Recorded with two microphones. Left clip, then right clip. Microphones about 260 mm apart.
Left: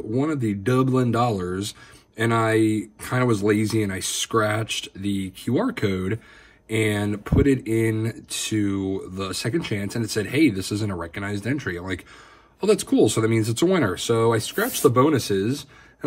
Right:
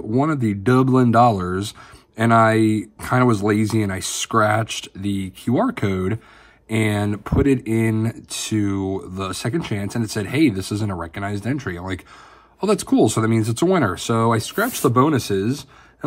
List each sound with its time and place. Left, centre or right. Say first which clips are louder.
0.1 s speech: right 4 dB; centre